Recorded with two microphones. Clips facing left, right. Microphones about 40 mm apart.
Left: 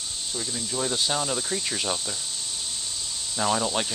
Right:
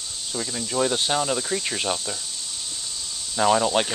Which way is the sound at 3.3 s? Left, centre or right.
Right.